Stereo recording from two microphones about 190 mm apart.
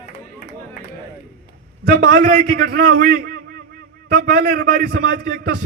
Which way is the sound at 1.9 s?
55° right (ahead or behind).